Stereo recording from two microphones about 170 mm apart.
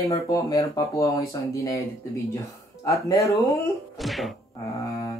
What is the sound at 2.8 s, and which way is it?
Speech, 20° left (ahead or behind).